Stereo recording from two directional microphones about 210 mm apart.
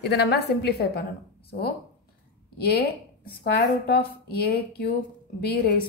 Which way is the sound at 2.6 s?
50° left (ahead or behind).